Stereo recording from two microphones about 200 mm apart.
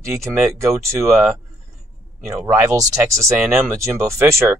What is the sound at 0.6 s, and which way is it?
Speech, 15° right (ahead or behind).